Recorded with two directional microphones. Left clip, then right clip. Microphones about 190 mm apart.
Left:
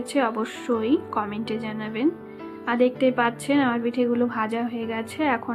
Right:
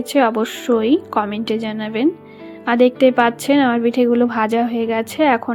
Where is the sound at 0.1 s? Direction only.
30° right (ahead or behind).